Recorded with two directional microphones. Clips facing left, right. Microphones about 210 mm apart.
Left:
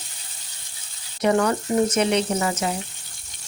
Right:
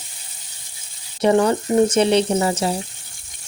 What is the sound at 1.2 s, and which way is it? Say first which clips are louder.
Speech: right 4 dB; 30° right (ahead or behind).